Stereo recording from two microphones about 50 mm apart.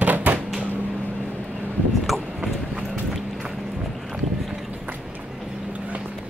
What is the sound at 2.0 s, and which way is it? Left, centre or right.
Vehicle, centre.